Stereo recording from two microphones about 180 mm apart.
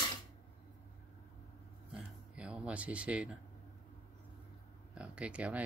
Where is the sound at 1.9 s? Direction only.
5° right (ahead or behind).